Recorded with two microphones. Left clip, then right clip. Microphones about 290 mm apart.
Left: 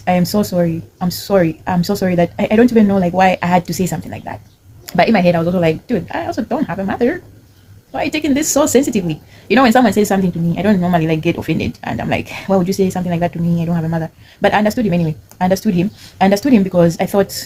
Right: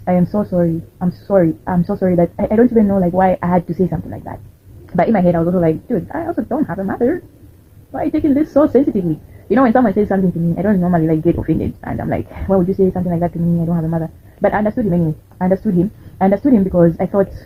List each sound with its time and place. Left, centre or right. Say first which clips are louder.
0.0 s speech: left 2 dB; left